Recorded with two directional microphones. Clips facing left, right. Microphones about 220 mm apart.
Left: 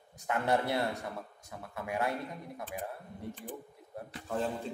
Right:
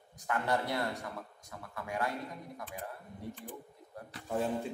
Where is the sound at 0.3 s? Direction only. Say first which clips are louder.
Left 3 dB; 25° left (ahead or behind).